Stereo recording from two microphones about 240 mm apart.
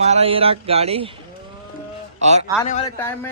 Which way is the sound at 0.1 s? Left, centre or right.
Right.